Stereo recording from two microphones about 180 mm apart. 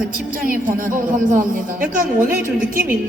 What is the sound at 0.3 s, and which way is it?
A woman's voice, 50° right (ahead or behind).